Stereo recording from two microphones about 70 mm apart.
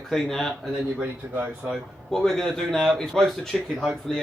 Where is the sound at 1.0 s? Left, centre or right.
Right.